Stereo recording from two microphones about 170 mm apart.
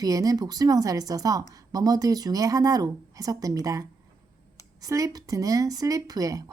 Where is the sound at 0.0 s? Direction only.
20° right (ahead or behind).